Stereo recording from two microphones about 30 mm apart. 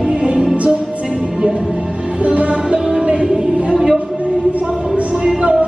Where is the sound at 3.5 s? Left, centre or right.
Right.